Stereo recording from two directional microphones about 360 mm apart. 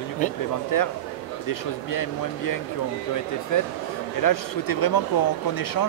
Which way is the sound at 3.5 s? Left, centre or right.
Left.